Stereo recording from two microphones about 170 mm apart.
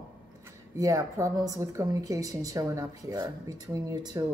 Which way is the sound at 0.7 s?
20° right (ahead or behind).